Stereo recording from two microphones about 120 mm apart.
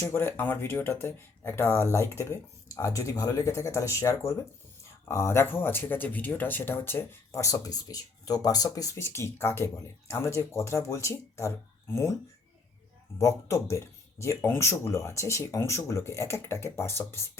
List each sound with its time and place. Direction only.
0.0 s speech: 20° left (ahead or behind)
13.1 s speech: 25° left (ahead or behind)